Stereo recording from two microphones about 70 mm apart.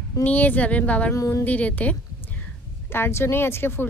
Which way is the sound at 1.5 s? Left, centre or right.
Left.